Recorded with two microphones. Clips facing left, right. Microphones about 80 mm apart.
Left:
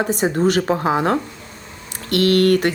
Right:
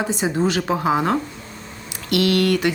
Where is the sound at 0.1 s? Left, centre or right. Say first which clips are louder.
Left 3 dB; left.